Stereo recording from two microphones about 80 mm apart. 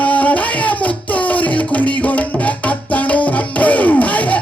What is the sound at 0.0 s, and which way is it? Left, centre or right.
Music, centre.